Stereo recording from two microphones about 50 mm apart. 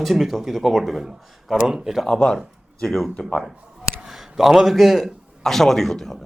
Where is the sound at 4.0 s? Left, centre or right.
Centre.